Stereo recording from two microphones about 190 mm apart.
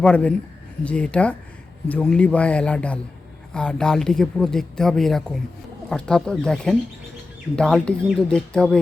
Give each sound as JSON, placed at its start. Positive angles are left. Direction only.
{"t": 0.0, "sound": "speech", "side_deg": 5}